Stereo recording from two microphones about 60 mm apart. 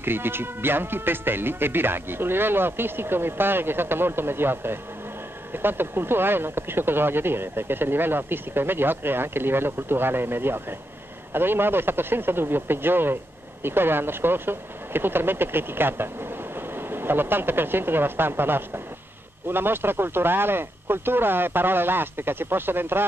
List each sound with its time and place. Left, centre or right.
0.0 s speech: right